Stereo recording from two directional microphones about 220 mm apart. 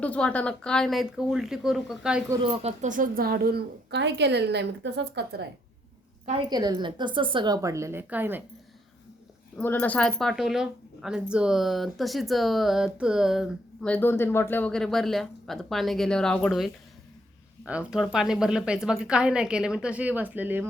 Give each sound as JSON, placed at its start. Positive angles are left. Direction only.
{"t": 0.0, "sound": "speech", "side_deg": 5}
{"t": 2.3, "sound": "a woman's voice", "side_deg": -25}
{"t": 6.5, "sound": "a woman's voice", "side_deg": -20}
{"t": 9.6, "sound": "speech", "side_deg": 10}